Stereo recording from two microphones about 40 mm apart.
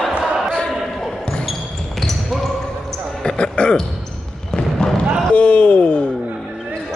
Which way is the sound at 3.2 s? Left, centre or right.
Left.